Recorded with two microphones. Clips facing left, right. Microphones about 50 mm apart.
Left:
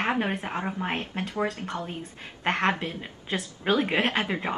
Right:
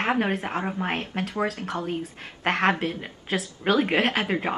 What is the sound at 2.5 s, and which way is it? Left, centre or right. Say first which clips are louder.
Speech: right 2 dB; centre.